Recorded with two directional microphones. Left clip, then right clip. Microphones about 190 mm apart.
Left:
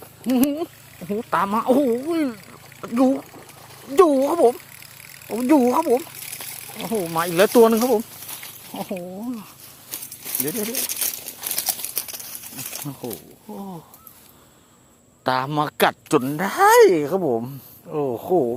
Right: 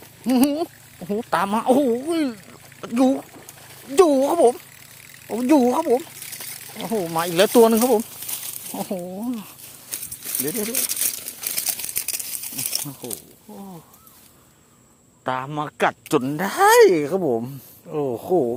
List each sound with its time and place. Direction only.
0.3 s a sound: 20° right (ahead or behind)
1.1 s speech: 15° right (ahead or behind)
3.3 s a sound: 30° right (ahead or behind)
3.9 s speech: 15° right (ahead or behind)
8.3 s a sound: 30° right (ahead or behind)
9.1 s a sound: 20° right (ahead or behind)
10.5 s speech: 10° right (ahead or behind)
10.8 s crumpling: 25° right (ahead or behind)
11.9 s crumpling: 50° right (ahead or behind)
12.8 s speech: centre (ahead or behind)
13.5 s speech: 15° left (ahead or behind)
15.2 s speech: 15° left (ahead or behind)
16.0 s speech: 10° right (ahead or behind)